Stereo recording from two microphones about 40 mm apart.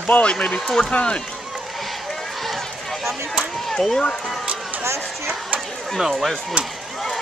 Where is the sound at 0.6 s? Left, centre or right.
Centre.